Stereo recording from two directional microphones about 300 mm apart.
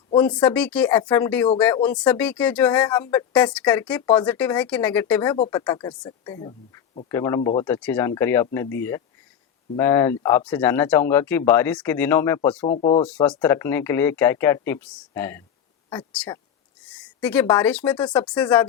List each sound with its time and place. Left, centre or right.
0.2 s speech: centre
12.7 s speech: centre
13.2 s speech: centre